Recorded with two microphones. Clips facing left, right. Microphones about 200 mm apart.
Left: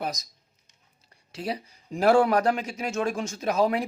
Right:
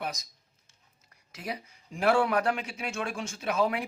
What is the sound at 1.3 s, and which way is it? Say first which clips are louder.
Speech: left 6 dB; 30° left (ahead or behind).